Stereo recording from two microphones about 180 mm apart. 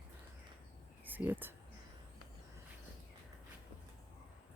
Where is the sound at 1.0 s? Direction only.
10° right (ahead or behind).